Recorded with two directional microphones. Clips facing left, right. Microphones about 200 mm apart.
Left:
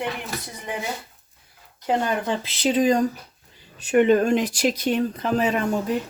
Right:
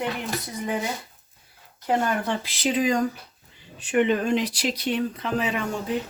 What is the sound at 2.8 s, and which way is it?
Speech, 35° left (ahead or behind).